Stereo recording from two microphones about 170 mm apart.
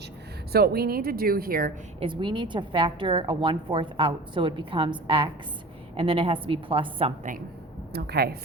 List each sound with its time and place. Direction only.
0.5 s speech: 65° right (ahead or behind)
2.0 s a woman's voice: 30° right (ahead or behind)
7.9 s speech: 70° right (ahead or behind)